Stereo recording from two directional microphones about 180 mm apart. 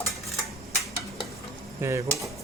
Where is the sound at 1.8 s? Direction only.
15° right (ahead or behind).